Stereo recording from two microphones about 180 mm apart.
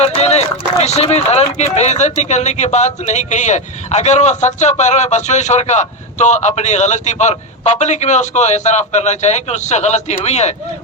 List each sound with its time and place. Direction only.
0.0 s a man's voice: 35° left (ahead or behind)